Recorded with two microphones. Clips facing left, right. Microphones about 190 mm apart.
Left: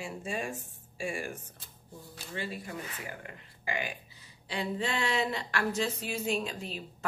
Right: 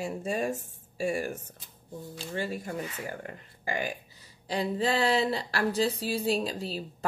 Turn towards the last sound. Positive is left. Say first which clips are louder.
# right 5 dB
turn(degrees=-35)  # may be behind; listen again after turning